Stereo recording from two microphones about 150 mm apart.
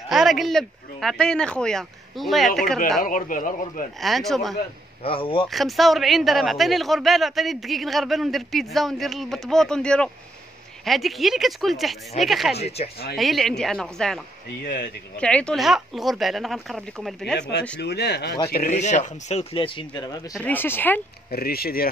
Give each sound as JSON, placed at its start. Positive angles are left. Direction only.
{"t": 0.1, "sound": "speech", "side_deg": 0}
{"t": 3.0, "sound": "a man's voice", "side_deg": 65}
{"t": 4.0, "sound": "speech", "side_deg": 0}
{"t": 5.0, "sound": "speech", "side_deg": 35}
{"t": 5.5, "sound": "speech", "side_deg": 0}
{"t": 12.5, "sound": "speech", "side_deg": 45}
{"t": 13.1, "sound": "speech", "side_deg": 0}
{"t": 17.8, "sound": "speech", "side_deg": 90}
{"t": 18.7, "sound": "speech", "side_deg": 50}
{"t": 20.4, "sound": "speech", "side_deg": 15}
{"t": 21.3, "sound": "speech", "side_deg": 90}